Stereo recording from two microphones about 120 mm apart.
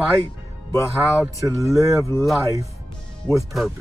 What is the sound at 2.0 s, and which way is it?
Speech, 20° left (ahead or behind).